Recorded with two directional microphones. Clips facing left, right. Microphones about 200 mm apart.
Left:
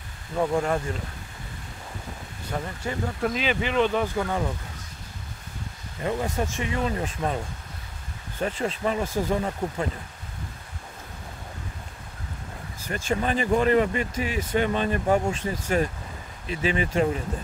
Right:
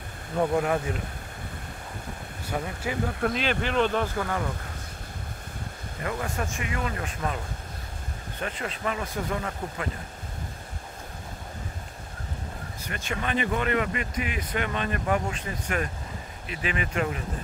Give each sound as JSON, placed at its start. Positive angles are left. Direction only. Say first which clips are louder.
{"t": 0.4, "sound": "speech", "louder": "even", "side_deg": -5}
{"t": 2.5, "sound": "speech", "louder": "even", "side_deg": -5}
{"t": 6.0, "sound": "speech", "louder": "left 4 dB", "side_deg": 25}
{"t": 8.4, "sound": "speech", "louder": "left 6 dB", "side_deg": 30}
{"t": 12.8, "sound": "speech", "louder": "left 6 dB", "side_deg": 35}